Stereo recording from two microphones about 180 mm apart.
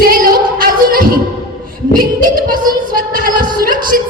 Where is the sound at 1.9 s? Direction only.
50° right (ahead or behind).